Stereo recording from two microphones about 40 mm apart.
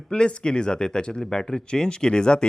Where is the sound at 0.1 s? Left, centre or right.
Left.